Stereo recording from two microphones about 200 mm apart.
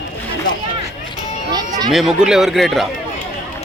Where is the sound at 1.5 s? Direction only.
20° right (ahead or behind).